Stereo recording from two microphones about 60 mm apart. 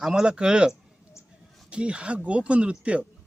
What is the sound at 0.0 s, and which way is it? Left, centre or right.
Speech, centre.